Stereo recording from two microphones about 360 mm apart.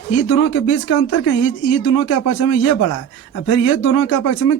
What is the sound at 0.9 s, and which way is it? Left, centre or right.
A woman's voice, left.